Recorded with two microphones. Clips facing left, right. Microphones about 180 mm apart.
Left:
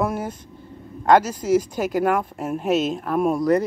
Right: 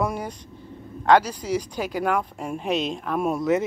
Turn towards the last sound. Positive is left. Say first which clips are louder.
# left 3 dB
turn(degrees=0)  # may be behind; listen again after turning